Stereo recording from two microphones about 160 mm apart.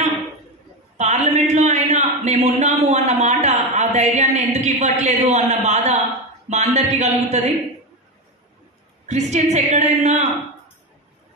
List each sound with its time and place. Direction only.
0.9 s a man's voice: 45° right (ahead or behind)
9.0 s a woman's voice: 45° right (ahead or behind)